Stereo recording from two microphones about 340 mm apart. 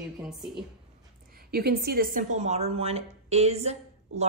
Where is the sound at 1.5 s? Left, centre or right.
Right.